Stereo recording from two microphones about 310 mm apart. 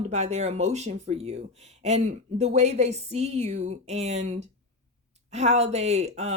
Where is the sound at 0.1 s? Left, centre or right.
Right.